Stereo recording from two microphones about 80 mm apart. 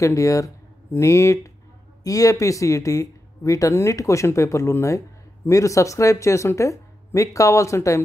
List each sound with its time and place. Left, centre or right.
0.0 s speech: left